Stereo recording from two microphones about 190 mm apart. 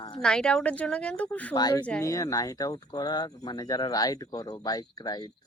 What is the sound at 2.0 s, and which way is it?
Speech, 15° left (ahead or behind).